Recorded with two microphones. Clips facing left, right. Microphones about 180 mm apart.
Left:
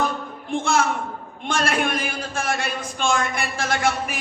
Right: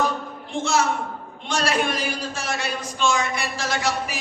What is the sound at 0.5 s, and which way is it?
A man's voice, 55° left (ahead or behind).